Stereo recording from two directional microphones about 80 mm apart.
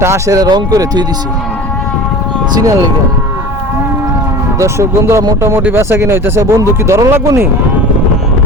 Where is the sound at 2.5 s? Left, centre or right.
Right.